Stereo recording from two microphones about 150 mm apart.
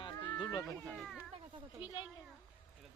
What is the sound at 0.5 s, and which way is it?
Speech, 20° left (ahead or behind).